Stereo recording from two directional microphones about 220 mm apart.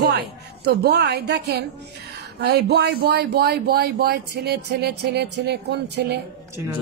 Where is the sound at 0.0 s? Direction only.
45° right (ahead or behind).